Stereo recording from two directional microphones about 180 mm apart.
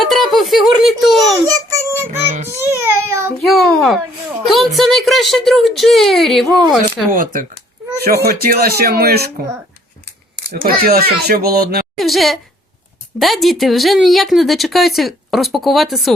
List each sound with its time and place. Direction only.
0.0 s giggle: centre (ahead or behind)
1.5 s child singing: 15° right (ahead or behind)
2.1 s child singing: 35° right (ahead or behind)
2.6 s a sound: 15° right (ahead or behind)
3.4 s a sound: centre (ahead or behind)
4.4 s a woman's voice: centre (ahead or behind)
6.8 s speech: 50° right (ahead or behind)
7.9 s speech: 60° right (ahead or behind)
10.5 s speech: 55° right (ahead or behind)
11.9 s a woman's voice: centre (ahead or behind)